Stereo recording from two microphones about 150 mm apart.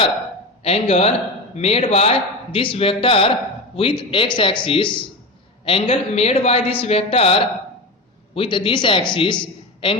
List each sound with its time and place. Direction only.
0.6 s a man's voice: 45° left (ahead or behind)
8.4 s a man's voice: 35° left (ahead or behind)